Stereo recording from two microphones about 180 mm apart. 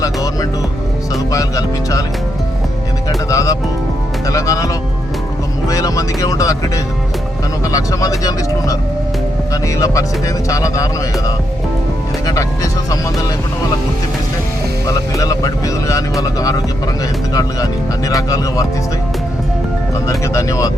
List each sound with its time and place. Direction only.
0.0 s speech: 20° left (ahead or behind)
3.2 s speech: 20° left (ahead or behind)
12.2 s speech: 20° left (ahead or behind)
14.8 s speech: 20° left (ahead or behind)
20.1 s speech: 15° left (ahead or behind)